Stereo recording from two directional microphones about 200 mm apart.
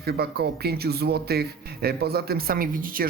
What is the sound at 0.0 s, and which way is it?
Speech, 50° right (ahead or behind).